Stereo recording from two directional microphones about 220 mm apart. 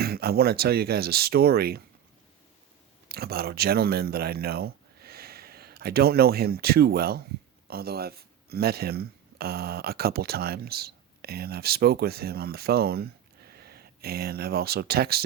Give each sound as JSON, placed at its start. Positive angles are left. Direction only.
{"t": 0.0, "sound": "speech", "side_deg": -45}
{"t": 3.1, "sound": "speech", "side_deg": -45}